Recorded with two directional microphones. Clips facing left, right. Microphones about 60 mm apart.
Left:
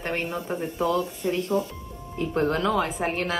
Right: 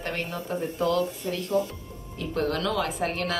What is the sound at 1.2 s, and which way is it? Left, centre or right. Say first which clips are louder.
Speech: left 4 dB; left.